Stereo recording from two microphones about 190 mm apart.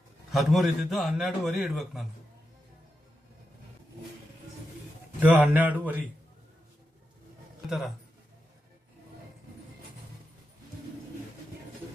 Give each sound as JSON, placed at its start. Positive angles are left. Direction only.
{"t": 0.3, "sound": "a man's voice", "side_deg": 0}
{"t": 5.2, "sound": "speech", "side_deg": -10}
{"t": 7.7, "sound": "a man's voice", "side_deg": 0}